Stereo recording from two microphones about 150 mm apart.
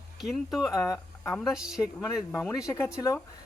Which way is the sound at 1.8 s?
25° left (ahead or behind).